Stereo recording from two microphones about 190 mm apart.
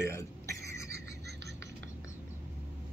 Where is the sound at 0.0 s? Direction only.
15° left (ahead or behind).